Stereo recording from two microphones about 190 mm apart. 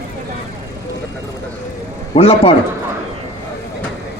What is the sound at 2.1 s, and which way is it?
Speech, 30° left (ahead or behind).